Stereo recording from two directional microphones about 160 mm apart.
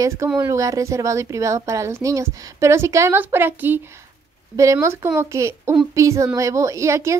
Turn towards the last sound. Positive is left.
turn(degrees=-20)  # may be behind; listen again after turning